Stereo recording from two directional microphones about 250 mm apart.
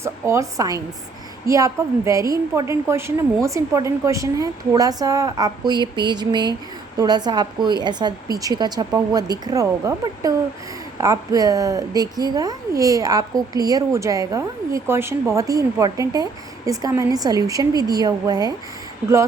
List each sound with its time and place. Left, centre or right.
0.0 s a woman's voice: centre